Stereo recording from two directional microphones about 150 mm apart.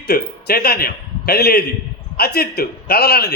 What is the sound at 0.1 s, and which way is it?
A man's voice, 90° left.